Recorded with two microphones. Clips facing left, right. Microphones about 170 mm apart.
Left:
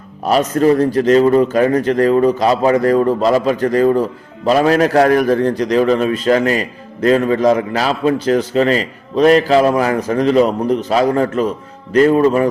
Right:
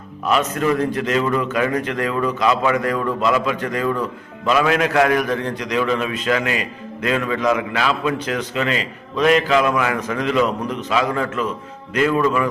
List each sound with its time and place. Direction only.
0.3 s a man's voice: 35° left (ahead or behind)